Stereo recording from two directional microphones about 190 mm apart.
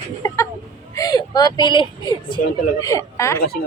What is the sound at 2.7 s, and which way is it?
Speech, 20° left (ahead or behind).